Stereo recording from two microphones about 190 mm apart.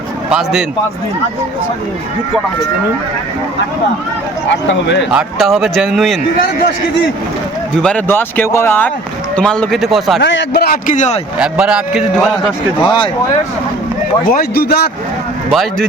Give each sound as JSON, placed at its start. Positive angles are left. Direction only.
{"t": 0.3, "sound": "a man's voice", "side_deg": -5}
{"t": 4.7, "sound": "speech", "side_deg": 65}
{"t": 5.1, "sound": "a man's voice", "side_deg": 0}
{"t": 7.8, "sound": "a man's voice", "side_deg": 5}
{"t": 10.2, "sound": "a man's voice", "side_deg": 65}
{"t": 11.3, "sound": "a man's voice", "side_deg": -5}
{"t": 12.8, "sound": "speech", "side_deg": 25}
{"t": 14.3, "sound": "speech", "side_deg": 50}